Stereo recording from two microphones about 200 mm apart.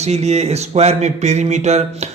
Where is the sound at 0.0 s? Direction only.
35° right (ahead or behind).